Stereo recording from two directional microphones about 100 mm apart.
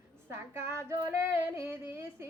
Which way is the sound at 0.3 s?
25° right (ahead or behind).